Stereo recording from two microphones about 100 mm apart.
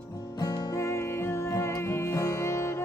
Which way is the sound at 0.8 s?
25° left (ahead or behind).